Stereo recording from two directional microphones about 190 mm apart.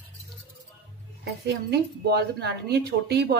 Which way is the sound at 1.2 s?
60° right (ahead or behind).